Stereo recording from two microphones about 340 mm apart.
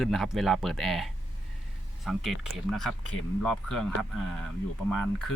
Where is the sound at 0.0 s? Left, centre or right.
Centre.